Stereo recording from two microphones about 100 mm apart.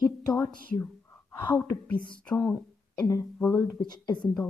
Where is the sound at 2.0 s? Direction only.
10° left (ahead or behind).